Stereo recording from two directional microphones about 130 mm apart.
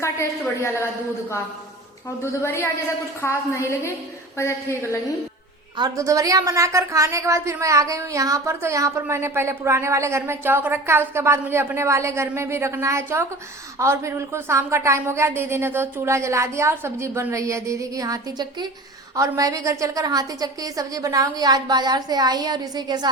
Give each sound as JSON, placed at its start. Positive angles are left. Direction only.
{"t": 0.0, "sound": "a woman's voice", "side_deg": 20}
{"t": 2.2, "sound": "a woman's voice", "side_deg": 20}
{"t": 5.7, "sound": "a woman's voice", "side_deg": -30}